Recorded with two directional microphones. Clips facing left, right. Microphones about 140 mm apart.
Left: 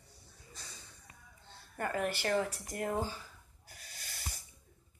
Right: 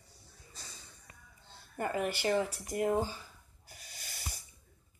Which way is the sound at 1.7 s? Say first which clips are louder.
Right 1 dB; 15° right (ahead or behind).